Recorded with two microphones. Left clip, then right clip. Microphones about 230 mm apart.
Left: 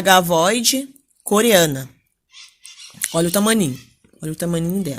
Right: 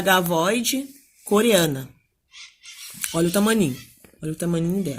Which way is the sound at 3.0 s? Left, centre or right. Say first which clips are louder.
Left 3 dB; left.